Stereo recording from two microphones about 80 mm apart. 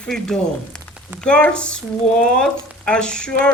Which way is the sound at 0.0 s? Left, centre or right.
Centre.